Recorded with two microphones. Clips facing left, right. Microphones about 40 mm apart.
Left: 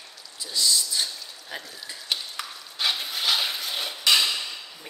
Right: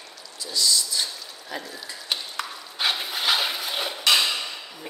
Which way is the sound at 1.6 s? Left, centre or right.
Centre.